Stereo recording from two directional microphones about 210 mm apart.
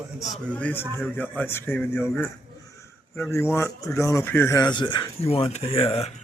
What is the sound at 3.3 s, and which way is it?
Speech, 15° left (ahead or behind).